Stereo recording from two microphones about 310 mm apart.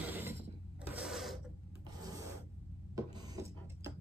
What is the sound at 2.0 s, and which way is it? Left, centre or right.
Rub, centre.